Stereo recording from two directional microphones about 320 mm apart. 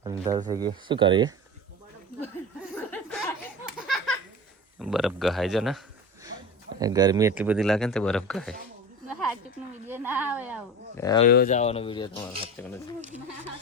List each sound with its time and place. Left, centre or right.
0.0 s speech: centre
2.7 s chuckle: centre
3.8 s a sound: centre
4.8 s speech: centre
6.7 s speech: centre
9.8 s a woman's voice: centre
10.9 s speech: centre
11.3 s speech: left